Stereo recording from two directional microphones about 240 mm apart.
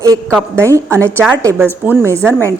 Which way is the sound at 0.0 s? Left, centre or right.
Centre.